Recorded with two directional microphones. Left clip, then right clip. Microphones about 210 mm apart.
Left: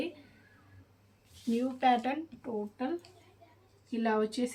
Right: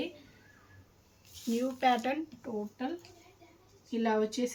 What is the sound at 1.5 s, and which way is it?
A woman's voice, 5° right (ahead or behind).